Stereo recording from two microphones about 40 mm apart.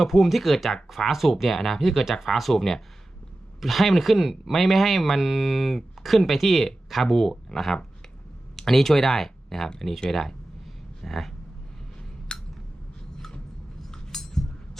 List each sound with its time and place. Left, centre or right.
0.0 s speech: centre
12.3 s a sound: left
13.9 s chink: centre